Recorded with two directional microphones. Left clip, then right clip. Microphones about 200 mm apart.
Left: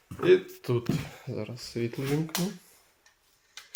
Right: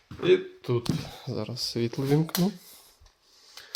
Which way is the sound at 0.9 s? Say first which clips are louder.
Right 1 dB; 25° right (ahead or behind).